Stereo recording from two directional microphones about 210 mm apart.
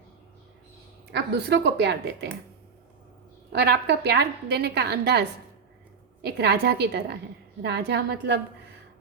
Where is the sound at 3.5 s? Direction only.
50° right (ahead or behind).